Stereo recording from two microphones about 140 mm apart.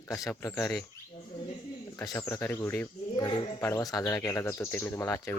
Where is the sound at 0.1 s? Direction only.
25° left (ahead or behind).